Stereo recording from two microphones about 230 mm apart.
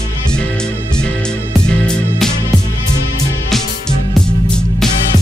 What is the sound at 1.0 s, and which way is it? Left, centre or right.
Music, centre.